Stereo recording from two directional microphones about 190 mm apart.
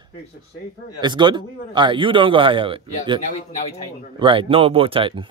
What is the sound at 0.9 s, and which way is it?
A man's voice, 25° right (ahead or behind).